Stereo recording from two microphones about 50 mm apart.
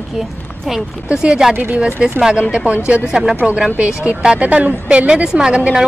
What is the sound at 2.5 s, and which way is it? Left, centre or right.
Speech, right.